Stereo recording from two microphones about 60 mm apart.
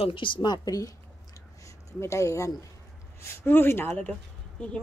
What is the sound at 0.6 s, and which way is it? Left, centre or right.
Speech, left.